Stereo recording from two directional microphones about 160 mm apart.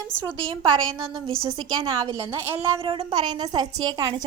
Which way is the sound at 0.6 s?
30° right (ahead or behind).